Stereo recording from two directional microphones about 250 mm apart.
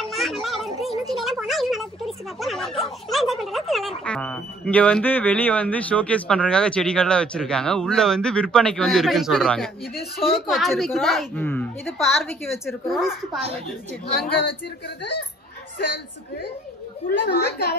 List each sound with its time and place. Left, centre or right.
0.0 s children playing: centre
0.7 s a sound: centre
4.0 s speech: centre
17.1 s a woman's voice: left